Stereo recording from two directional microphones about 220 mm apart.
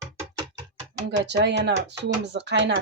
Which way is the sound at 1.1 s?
50° right (ahead or behind).